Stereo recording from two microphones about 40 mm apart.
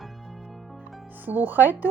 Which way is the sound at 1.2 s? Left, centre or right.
Right.